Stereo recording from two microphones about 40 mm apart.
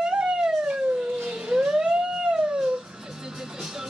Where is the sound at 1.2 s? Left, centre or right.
Right.